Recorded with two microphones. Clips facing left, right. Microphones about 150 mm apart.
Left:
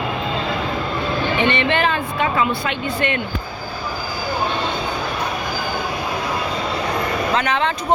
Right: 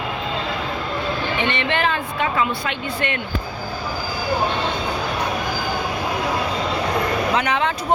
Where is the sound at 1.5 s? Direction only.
15° left (ahead or behind).